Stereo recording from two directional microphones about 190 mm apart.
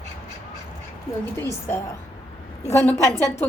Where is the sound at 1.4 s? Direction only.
10° left (ahead or behind).